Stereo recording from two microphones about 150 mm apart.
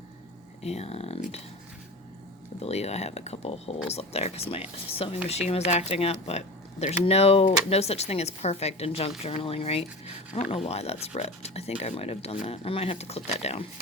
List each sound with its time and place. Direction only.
0.6 s speech: 45° left (ahead or behind)
2.6 s speech: 45° left (ahead or behind)